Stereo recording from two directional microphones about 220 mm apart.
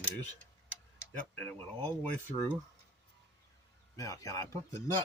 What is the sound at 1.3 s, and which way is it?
Speech, 10° left (ahead or behind).